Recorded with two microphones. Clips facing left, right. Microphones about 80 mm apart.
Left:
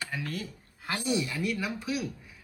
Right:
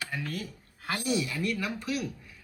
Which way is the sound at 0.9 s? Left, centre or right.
Left.